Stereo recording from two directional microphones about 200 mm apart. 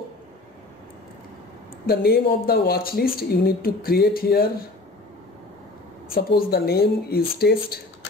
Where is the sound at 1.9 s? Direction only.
50° left (ahead or behind).